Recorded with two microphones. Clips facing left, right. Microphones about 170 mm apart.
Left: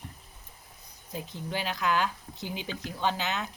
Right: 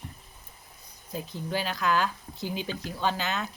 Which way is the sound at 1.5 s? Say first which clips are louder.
Right 2 dB; 15° left (ahead or behind).